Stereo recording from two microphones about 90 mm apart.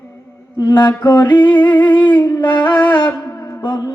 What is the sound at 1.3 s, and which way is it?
Music, 15° left (ahead or behind).